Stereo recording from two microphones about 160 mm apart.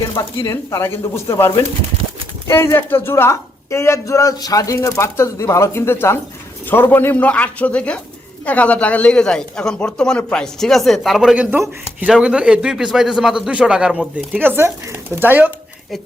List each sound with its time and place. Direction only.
0.3 s a man's voice: 20° left (ahead or behind); by 15.4 s 10° right (ahead or behind)